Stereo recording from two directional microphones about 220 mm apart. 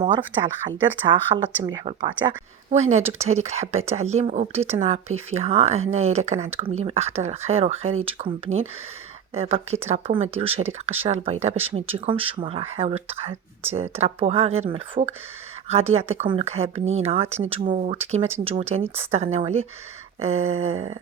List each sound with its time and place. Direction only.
0.8 s speech: 20° right (ahead or behind)